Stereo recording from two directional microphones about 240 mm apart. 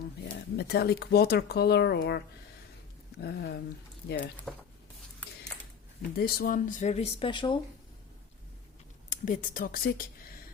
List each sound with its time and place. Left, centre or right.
0.5 s speech: left
4.5 s speech: centre
6.1 s speech: left; by 7.6 s centre
9.0 s speech: left